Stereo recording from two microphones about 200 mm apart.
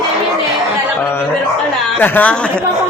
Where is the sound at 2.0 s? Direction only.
10° left (ahead or behind).